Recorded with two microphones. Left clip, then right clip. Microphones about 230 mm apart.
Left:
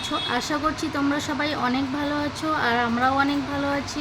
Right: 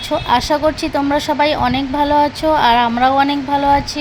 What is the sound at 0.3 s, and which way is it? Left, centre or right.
Speech, centre.